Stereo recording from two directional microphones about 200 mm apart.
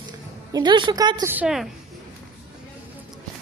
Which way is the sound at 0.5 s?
25° right (ahead or behind).